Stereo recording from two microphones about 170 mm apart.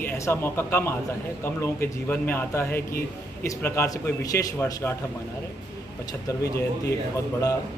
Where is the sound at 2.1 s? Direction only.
10° left (ahead or behind).